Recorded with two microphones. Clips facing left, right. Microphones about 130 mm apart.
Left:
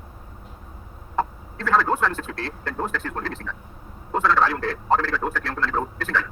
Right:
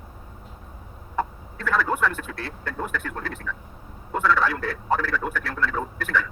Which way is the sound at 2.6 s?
35° left (ahead or behind).